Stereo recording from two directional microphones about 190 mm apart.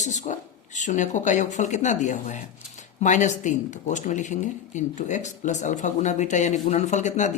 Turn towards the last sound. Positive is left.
turn(degrees=40)  # may be behind; listen again after turning